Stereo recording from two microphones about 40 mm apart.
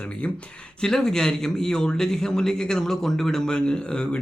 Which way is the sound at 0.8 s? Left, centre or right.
Centre.